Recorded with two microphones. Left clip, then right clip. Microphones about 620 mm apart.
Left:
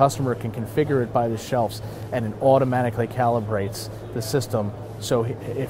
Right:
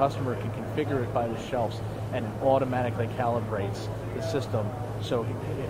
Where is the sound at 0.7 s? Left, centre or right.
Left.